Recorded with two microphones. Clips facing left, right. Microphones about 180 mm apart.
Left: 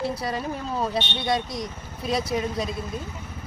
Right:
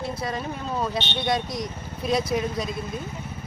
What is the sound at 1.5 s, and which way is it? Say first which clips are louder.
Speech: right 1 dB; centre (ahead or behind).